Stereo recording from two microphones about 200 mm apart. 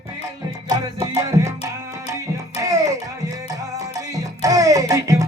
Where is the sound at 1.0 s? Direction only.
15° right (ahead or behind).